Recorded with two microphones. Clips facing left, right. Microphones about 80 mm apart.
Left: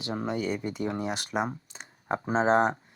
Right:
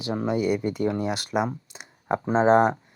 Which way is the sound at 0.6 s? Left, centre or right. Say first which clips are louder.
Right 6 dB; right.